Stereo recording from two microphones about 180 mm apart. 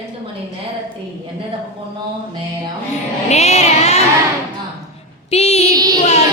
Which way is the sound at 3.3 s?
35° left (ahead or behind).